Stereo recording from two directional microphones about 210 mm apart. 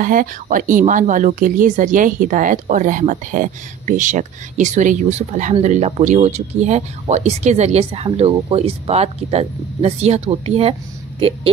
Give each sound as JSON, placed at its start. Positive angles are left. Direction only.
{"t": 0.0, "sound": "speech", "side_deg": -40}